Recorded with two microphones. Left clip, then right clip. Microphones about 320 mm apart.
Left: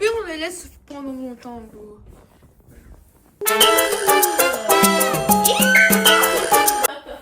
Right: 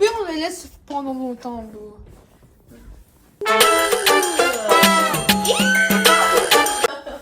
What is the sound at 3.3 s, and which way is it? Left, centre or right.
Music, centre.